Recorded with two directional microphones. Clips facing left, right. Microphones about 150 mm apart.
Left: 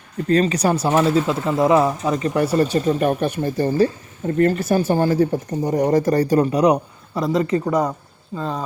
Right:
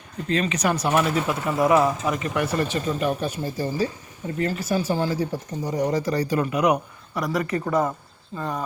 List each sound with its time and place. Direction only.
0.3 s speech: 40° left (ahead or behind); by 8.6 s 20° left (ahead or behind)